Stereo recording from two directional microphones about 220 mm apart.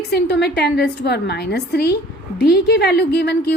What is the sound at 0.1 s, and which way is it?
A woman's voice, 50° left (ahead or behind).